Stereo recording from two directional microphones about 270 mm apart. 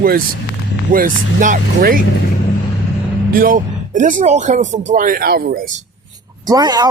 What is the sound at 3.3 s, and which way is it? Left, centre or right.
A man's voice, right.